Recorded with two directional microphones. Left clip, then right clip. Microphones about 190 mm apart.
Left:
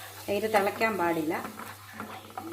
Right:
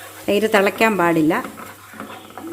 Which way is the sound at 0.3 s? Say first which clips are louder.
Right 10 dB; 65° right (ahead or behind).